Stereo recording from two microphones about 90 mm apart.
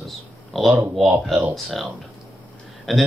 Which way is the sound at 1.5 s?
Centre (ahead or behind).